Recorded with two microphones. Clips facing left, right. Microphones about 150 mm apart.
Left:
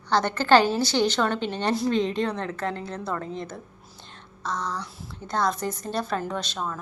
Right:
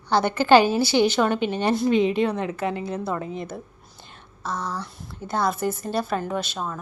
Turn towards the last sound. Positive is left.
turn(degrees=-5)  # may be behind; listen again after turning